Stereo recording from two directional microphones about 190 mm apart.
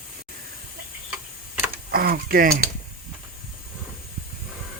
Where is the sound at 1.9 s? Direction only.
50° right (ahead or behind).